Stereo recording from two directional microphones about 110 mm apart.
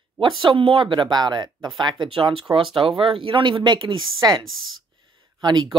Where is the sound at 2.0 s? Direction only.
55° right (ahead or behind).